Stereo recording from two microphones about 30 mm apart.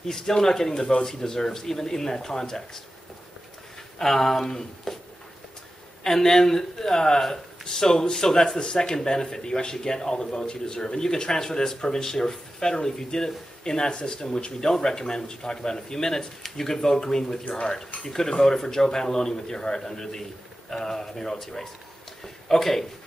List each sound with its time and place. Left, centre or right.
0.0 s a man's voice: centre
4.0 s a man's voice: centre
6.0 s a man's voice: centre